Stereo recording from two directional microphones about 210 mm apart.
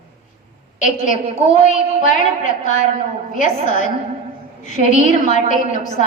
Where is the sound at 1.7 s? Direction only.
35° left (ahead or behind).